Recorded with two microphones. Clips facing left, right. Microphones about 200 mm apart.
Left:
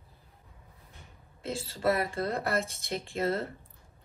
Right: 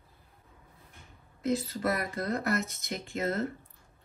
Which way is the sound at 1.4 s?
30° left (ahead or behind).